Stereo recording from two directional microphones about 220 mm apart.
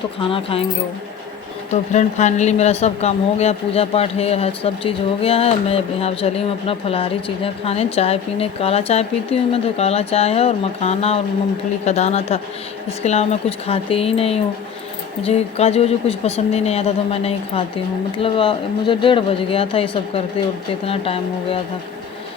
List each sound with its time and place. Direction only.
0.2 s speech: 25° left (ahead or behind)
1.7 s speech: 30° left (ahead or behind)